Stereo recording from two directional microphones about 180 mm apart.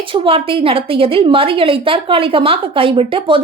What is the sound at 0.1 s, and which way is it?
A woman's voice, 30° right (ahead or behind).